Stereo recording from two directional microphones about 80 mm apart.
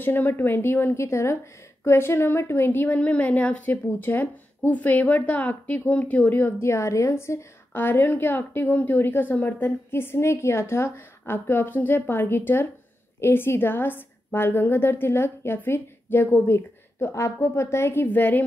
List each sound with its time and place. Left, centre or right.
0.0 s a woman's voice: left